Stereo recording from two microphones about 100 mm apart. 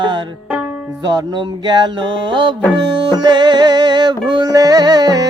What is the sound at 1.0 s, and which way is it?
Music, 45° right (ahead or behind).